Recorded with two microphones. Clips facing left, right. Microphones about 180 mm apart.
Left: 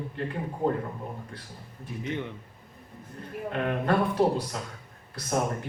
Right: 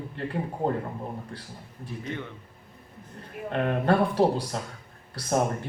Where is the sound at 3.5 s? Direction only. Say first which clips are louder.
Right 3 dB; 35° right (ahead or behind).